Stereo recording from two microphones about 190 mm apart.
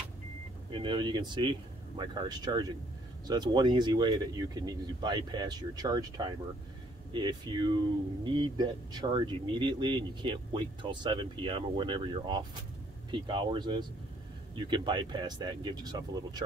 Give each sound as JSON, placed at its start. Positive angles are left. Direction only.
{"t": 0.7, "sound": "speech", "side_deg": -25}